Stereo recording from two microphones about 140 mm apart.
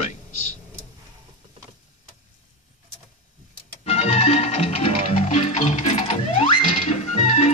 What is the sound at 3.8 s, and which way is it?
Music, 50° left (ahead or behind).